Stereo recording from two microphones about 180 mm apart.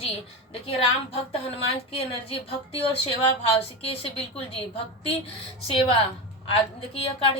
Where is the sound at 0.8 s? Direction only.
30° left (ahead or behind).